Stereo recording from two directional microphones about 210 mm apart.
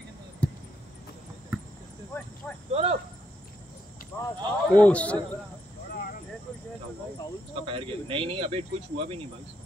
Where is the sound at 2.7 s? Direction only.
30° right (ahead or behind).